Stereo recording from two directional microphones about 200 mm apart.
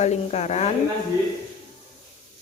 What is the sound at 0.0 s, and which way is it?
Speech, 35° left (ahead or behind).